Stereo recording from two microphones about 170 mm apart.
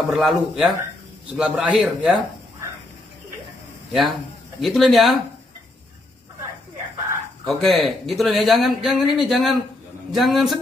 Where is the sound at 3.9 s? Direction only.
Centre (ahead or behind).